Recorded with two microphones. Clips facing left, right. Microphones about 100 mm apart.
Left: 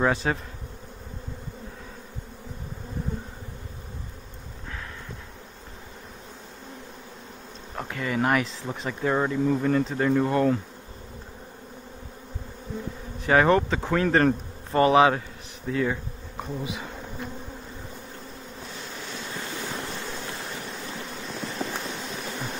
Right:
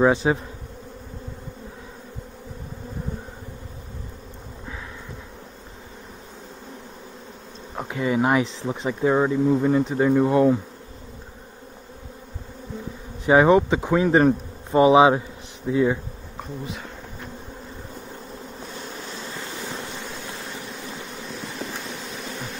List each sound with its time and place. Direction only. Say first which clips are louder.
0.0 s speech: right 6 dB; 20° right (ahead or behind)
7.7 s speech: right 5 dB; 15° right (ahead or behind)
13.2 s bee: right 4 dB; 15° right (ahead or behind)
16.3 s bee: left 1 dB; 5° left (ahead or behind)